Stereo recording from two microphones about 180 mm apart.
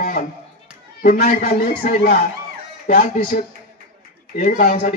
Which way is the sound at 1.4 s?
60° left (ahead or behind).